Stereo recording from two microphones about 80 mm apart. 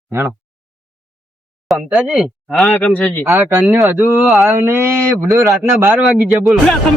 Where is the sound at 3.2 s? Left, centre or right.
Right.